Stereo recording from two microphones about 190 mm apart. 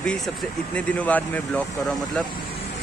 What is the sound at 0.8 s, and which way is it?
Speech, 5° left (ahead or behind).